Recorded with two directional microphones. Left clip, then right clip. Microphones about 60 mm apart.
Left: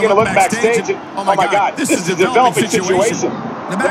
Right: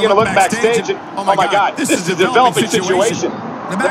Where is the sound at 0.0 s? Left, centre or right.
Centre.